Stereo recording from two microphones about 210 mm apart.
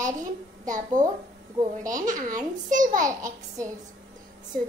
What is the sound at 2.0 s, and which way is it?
Speech, 40° right (ahead or behind).